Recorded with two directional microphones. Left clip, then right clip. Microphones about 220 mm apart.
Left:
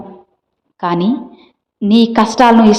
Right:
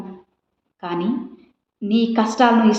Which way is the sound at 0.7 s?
40° left (ahead or behind).